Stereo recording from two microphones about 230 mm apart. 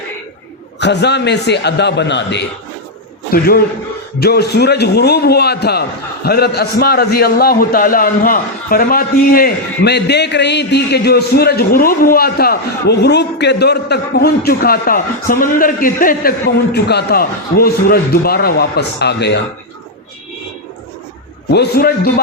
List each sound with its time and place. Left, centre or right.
0.8 s a man's voice: left
21.5 s a man's voice: left